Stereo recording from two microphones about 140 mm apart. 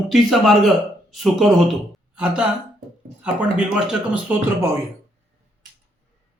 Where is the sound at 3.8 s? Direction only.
10° right (ahead or behind).